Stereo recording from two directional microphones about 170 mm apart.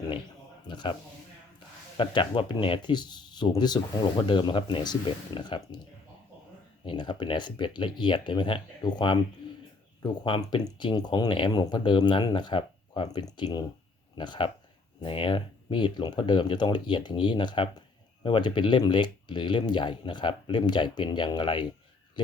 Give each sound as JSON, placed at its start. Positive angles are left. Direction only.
{"t": 0.7, "sound": "speech", "side_deg": 25}
{"t": 2.0, "sound": "speech", "side_deg": 30}
{"t": 6.8, "sound": "speech", "side_deg": 25}